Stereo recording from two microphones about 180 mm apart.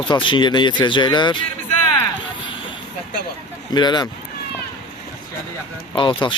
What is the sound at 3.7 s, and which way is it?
Speech, 25° left (ahead or behind).